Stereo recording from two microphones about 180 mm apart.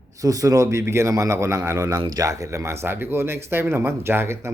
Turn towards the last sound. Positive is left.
turn(degrees=-15)  # may be behind; listen again after turning